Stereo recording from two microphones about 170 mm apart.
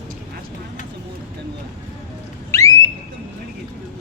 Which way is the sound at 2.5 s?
20° left (ahead or behind).